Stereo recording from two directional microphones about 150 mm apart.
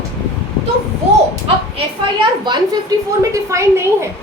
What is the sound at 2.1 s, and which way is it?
A woman's voice, 30° right (ahead or behind).